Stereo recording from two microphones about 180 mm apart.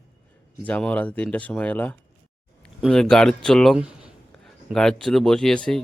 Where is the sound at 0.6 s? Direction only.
5° left (ahead or behind).